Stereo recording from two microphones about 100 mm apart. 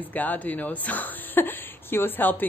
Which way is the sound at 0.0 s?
15° left (ahead or behind).